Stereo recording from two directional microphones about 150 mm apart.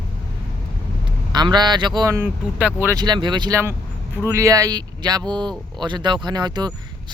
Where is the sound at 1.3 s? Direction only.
30° right (ahead or behind).